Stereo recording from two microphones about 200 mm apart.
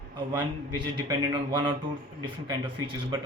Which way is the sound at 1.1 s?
20° right (ahead or behind).